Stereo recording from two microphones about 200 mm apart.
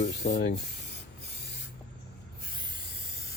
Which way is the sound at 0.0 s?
55° left (ahead or behind).